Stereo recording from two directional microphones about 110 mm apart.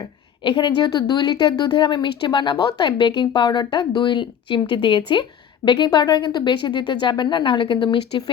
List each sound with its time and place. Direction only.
0.4 s a woman's voice: 45° left (ahead or behind)